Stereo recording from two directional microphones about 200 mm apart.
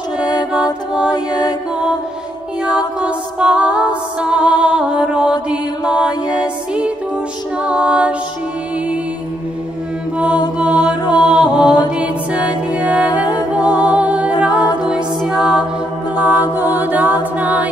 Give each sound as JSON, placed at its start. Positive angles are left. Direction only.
{"t": 1.1, "sound": "mantra", "side_deg": 20}
{"t": 3.0, "sound": "music", "side_deg": -5}
{"t": 10.1, "sound": "mantra", "side_deg": -5}
{"t": 11.9, "sound": "music", "side_deg": -5}
{"t": 14.4, "sound": "a capella", "side_deg": -5}
{"t": 14.8, "sound": "music", "side_deg": -5}